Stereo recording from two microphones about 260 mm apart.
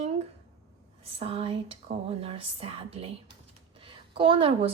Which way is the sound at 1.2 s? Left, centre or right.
Right.